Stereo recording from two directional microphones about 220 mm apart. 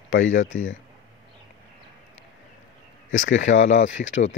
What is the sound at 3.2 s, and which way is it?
Speech, 60° left (ahead or behind).